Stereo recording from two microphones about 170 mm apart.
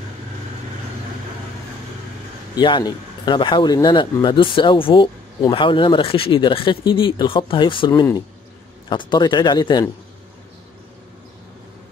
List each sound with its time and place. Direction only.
2.5 s speech: 25° left (ahead or behind)